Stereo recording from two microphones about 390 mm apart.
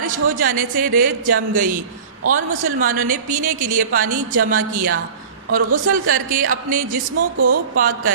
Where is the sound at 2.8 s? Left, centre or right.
Right.